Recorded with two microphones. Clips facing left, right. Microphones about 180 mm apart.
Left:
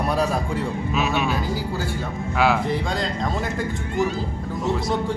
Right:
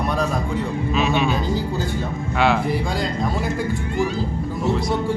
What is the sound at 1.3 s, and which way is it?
Speech, 20° right (ahead or behind).